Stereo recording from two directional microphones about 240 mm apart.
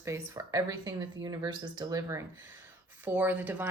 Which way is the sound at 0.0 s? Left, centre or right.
Centre.